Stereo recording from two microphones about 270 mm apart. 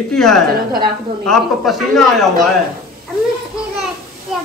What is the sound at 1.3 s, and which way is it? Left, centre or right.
A man's voice, centre.